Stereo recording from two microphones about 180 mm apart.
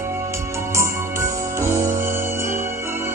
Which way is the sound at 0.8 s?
15° right (ahead or behind).